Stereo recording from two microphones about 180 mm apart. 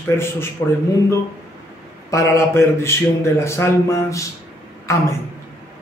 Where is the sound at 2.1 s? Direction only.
15° left (ahead or behind).